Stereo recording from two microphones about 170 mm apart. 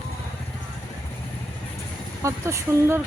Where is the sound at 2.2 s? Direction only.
15° right (ahead or behind).